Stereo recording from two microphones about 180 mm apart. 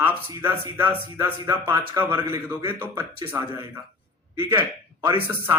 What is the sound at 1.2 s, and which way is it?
A man's voice, 15° right (ahead or behind).